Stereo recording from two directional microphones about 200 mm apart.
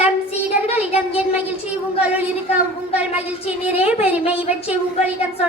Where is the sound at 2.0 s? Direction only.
5° right (ahead or behind).